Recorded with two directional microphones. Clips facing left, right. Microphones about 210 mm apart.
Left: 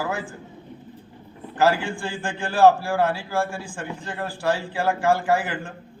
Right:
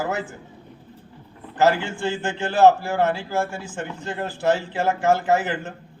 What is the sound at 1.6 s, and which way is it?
A man's voice, 20° right (ahead or behind).